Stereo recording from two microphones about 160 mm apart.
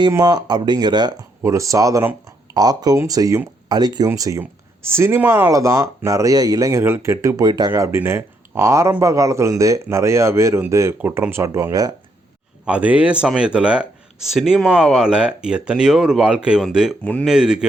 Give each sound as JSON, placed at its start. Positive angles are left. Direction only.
{"t": 0.1, "sound": "speech", "side_deg": -25}
{"t": 12.6, "sound": "speech", "side_deg": -5}
{"t": 17.0, "sound": "speech", "side_deg": 10}
{"t": 17.2, "sound": "speech", "side_deg": -5}